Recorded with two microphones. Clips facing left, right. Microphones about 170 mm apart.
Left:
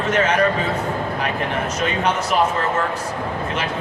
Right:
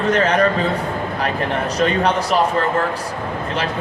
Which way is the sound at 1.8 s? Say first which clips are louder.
Right 5 dB; 35° right (ahead or behind).